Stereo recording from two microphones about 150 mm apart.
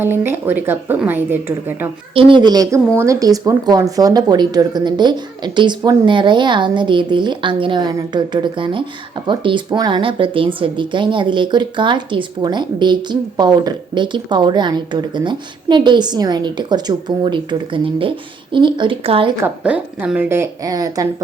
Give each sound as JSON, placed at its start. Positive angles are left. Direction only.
{"t": 0.0, "sound": "speech", "side_deg": -15}
{"t": 2.1, "sound": "a woman's voice", "side_deg": -35}
{"t": 19.6, "sound": "speech", "side_deg": -10}